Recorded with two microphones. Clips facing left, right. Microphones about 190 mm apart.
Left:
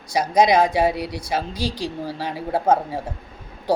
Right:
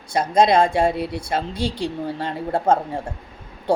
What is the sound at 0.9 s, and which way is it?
Speech, 25° right (ahead or behind).